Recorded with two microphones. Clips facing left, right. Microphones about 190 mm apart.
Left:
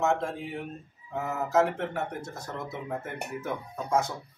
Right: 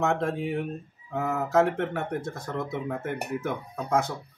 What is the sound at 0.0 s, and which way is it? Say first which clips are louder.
Speech: right 1 dB; 55° right (ahead or behind).